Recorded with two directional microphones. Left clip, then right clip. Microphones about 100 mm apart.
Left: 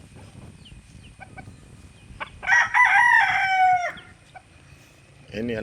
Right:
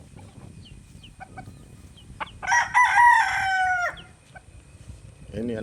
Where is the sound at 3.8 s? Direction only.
15° right (ahead or behind).